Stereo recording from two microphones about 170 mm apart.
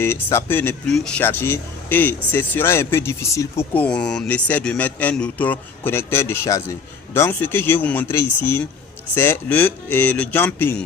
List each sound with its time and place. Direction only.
0.0 s speech: 15° left (ahead or behind)